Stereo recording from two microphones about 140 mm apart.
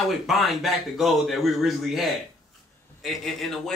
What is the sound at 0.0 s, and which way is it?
A man's voice, centre (ahead or behind).